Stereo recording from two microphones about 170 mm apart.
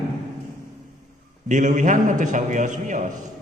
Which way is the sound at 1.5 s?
45° right (ahead or behind).